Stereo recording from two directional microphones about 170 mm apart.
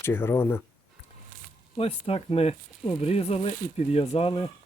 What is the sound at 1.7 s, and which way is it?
Speech, 35° left (ahead or behind).